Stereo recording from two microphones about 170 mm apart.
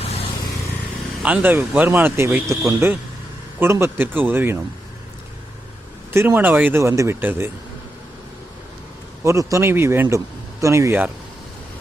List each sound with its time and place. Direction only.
0.0 s vehicle: 35° left (ahead or behind)
1.2 s a man's voice: 10° right (ahead or behind)
6.1 s a man's voice: 10° right (ahead or behind)
9.2 s a man's voice: 20° right (ahead or behind)